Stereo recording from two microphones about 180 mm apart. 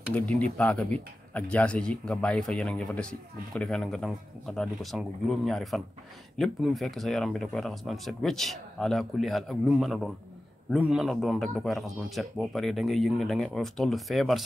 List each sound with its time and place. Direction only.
0.1 s speech: 5° left (ahead or behind)